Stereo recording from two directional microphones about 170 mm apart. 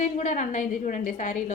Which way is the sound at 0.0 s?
45° left (ahead or behind).